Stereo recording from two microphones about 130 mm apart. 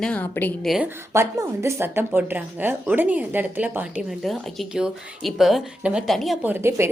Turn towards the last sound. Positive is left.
turn(degrees=-20)  # may be behind; listen again after turning